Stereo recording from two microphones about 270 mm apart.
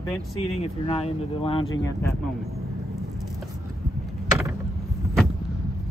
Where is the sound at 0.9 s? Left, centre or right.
Left.